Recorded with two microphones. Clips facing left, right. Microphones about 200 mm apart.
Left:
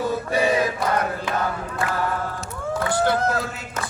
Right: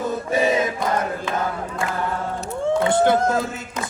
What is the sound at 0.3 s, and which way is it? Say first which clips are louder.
Choir: right 2 dB; 20° right (ahead or behind).